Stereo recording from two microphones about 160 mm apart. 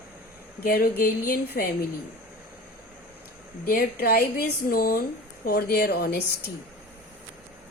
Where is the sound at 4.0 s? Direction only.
70° left (ahead or behind); by 6.2 s 90° left.